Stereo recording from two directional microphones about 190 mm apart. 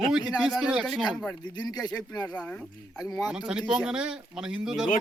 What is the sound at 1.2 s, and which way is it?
Speech, 20° left (ahead or behind).